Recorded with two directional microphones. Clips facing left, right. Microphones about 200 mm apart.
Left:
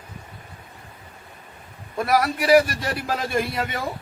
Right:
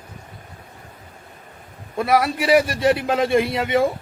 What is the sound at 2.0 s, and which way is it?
A man's voice, 25° right (ahead or behind).